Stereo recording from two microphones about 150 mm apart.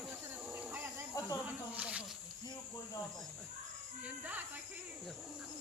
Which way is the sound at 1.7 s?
10° right (ahead or behind).